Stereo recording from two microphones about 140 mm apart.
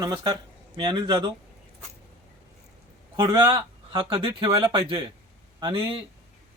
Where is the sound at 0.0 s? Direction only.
30° right (ahead or behind).